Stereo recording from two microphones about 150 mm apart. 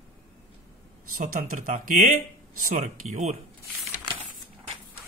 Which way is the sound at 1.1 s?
70° right (ahead or behind).